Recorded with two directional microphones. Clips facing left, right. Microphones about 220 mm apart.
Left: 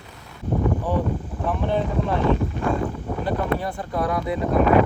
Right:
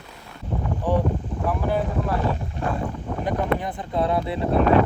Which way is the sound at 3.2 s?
20° right (ahead or behind).